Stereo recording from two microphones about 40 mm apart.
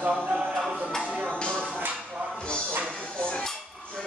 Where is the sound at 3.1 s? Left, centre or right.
Left.